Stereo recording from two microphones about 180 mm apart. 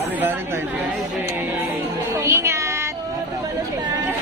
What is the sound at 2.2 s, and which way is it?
Music, 15° right (ahead or behind).